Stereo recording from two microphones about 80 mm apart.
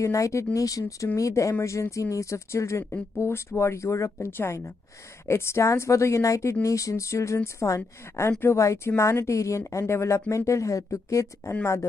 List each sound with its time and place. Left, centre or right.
0.0 s speech: left